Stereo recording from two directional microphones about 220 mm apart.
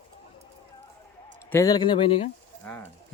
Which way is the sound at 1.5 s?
15° left (ahead or behind).